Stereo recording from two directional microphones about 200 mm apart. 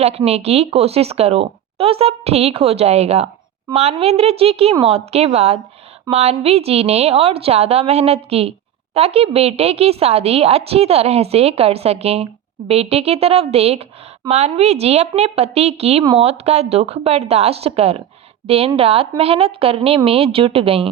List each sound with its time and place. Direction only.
0.0 s a woman's voice: 30° right (ahead or behind)